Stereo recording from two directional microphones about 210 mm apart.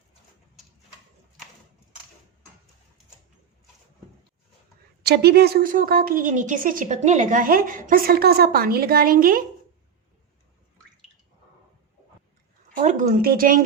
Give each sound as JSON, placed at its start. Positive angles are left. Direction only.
{"t": 5.0, "sound": "a woman's voice", "side_deg": -50}
{"t": 12.7, "sound": "speech", "side_deg": -35}